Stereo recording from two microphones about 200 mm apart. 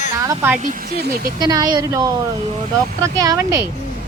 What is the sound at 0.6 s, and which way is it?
Speech, 45° right (ahead or behind).